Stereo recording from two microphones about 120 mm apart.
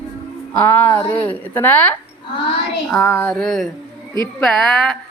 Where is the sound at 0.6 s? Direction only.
20° left (ahead or behind).